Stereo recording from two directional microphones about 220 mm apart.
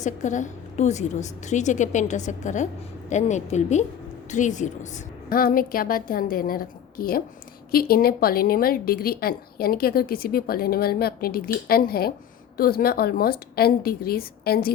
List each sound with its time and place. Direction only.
0.0 s a woman's voice: 35° left (ahead or behind)